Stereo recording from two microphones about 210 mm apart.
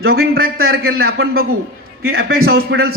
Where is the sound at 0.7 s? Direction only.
45° right (ahead or behind).